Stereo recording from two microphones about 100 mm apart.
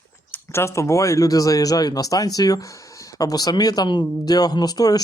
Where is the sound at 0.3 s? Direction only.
25° left (ahead or behind).